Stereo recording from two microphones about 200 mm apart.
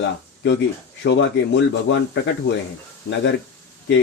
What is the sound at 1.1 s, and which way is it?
Speech, 65° left (ahead or behind).